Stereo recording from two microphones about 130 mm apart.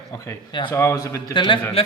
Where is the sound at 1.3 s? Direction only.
35° left (ahead or behind).